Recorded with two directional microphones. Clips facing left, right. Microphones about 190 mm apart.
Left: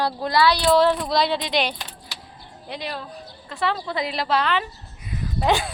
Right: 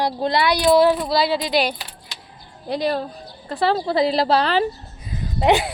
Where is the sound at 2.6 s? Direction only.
35° right (ahead or behind).